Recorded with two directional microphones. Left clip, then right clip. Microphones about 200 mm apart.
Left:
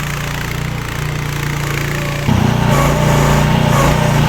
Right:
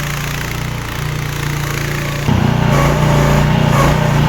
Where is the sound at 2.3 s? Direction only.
55° left (ahead or behind).